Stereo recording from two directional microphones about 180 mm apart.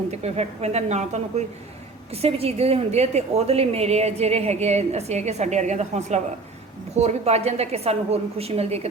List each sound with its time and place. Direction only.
0.1 s a woman's voice: 35° right (ahead or behind)